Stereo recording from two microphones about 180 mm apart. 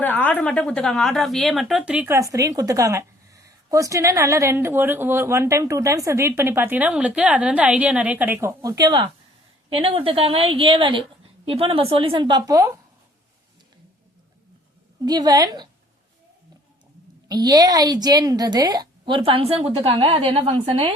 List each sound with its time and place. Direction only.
0.0 s a woman's voice: 10° left (ahead or behind); by 12.8 s 20° right (ahead or behind)
15.0 s a woman's voice: 20° right (ahead or behind)
17.2 s a woman's voice: 20° right (ahead or behind)